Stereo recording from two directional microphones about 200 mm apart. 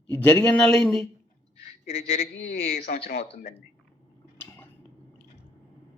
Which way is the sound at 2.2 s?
55° left (ahead or behind).